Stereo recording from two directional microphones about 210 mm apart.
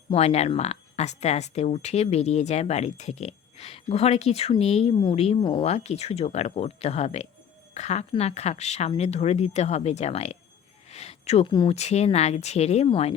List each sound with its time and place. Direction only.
0.1 s speech: 30° left (ahead or behind)